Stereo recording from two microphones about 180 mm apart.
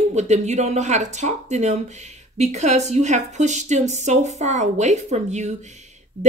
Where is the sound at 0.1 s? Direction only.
40° right (ahead or behind).